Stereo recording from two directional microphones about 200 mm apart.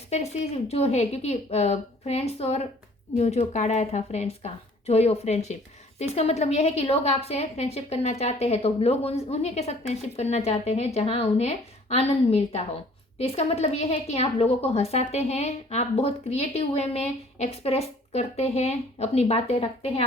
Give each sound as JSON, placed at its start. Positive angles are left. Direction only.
{"t": 0.1, "sound": "a woman's voice", "side_deg": 30}